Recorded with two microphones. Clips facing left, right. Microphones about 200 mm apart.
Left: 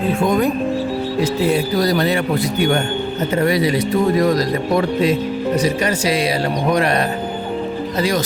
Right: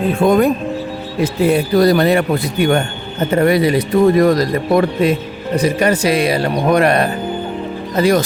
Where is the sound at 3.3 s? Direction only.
55° right (ahead or behind).